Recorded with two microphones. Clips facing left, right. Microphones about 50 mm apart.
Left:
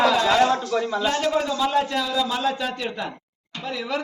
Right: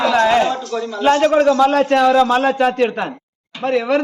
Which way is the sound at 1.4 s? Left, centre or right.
Right.